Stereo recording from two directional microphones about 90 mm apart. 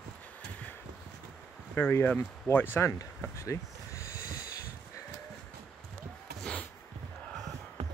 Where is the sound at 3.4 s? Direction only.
35° left (ahead or behind).